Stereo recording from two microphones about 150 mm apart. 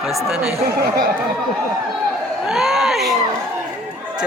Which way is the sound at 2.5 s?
Centre (ahead or behind).